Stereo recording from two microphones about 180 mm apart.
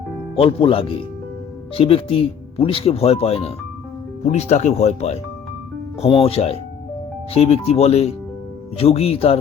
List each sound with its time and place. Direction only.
0.3 s speech: 30° left (ahead or behind)